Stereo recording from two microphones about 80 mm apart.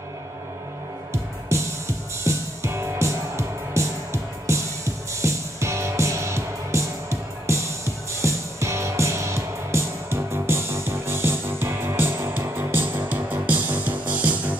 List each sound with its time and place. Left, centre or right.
1.1 s music: right; by 14.6 s centre